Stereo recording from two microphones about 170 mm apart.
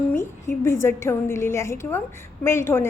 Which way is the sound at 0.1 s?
15° left (ahead or behind).